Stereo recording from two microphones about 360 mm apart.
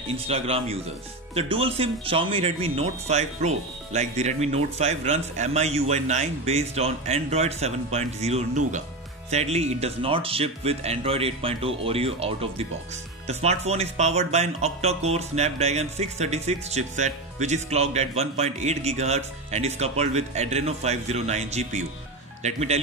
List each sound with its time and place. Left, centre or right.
0.3 s speech: centre